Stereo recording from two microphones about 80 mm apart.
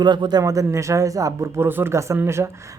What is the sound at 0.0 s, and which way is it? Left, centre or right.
Speech, right.